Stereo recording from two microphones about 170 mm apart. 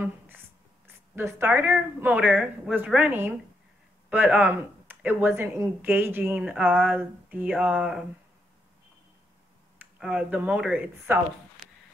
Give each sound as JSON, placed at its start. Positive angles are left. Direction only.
{"t": 1.1, "sound": "speech", "side_deg": -10}
{"t": 9.8, "sound": "speech", "side_deg": -5}